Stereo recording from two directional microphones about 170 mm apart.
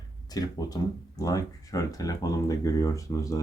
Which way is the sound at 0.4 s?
20° left (ahead or behind).